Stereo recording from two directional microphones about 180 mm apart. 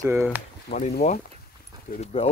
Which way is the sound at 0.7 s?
45° left (ahead or behind).